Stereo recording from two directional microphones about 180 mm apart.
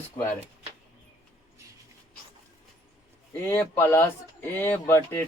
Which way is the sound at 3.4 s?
15° left (ahead or behind).